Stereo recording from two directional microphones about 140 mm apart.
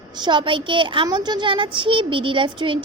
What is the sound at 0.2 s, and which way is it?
A woman's voice, 35° right (ahead or behind).